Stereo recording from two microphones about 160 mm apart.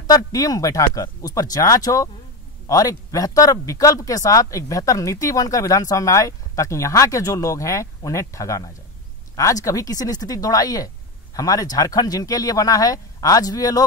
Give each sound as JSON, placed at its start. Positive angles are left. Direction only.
{"t": 0.0, "sound": "speech", "side_deg": 20}